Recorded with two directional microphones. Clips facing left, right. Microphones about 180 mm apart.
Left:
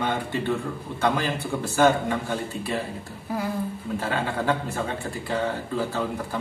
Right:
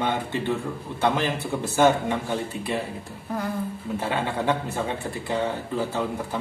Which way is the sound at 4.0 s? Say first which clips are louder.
Right 1 dB; 20° right (ahead or behind).